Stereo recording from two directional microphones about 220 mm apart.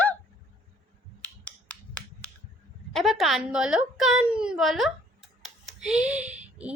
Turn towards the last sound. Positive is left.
turn(degrees=-5)  # may be behind; listen again after turning